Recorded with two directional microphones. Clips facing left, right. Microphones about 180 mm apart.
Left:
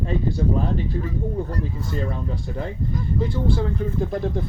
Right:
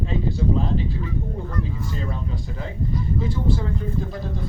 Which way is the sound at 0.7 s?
45° left (ahead or behind).